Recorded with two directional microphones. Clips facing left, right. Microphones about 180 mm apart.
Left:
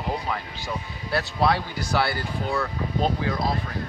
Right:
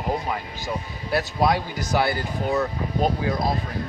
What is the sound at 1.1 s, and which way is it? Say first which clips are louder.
Speech: right 1 dB; 15° right (ahead or behind).